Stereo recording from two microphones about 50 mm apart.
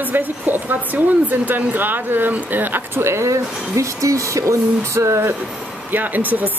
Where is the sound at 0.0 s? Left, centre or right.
Right.